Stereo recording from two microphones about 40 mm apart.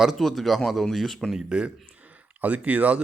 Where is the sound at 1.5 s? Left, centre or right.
Right.